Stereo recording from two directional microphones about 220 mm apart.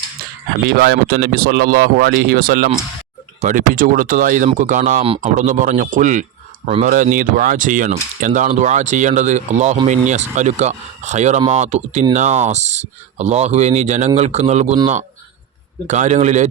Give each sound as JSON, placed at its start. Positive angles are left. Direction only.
{"t": 0.8, "sound": "speech", "side_deg": -45}
{"t": 15.9, "sound": "speech", "side_deg": -35}